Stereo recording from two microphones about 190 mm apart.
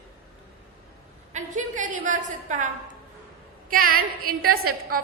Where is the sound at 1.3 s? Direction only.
40° right (ahead or behind).